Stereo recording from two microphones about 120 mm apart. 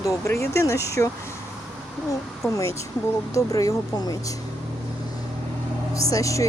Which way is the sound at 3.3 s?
30° left (ahead or behind).